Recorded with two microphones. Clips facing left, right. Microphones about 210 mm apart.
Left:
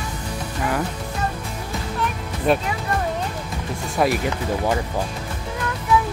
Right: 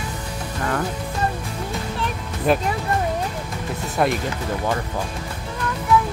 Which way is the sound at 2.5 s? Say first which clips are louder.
Even; centre (ahead or behind).